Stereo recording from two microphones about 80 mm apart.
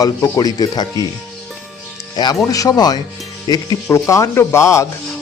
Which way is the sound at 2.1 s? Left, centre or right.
Left.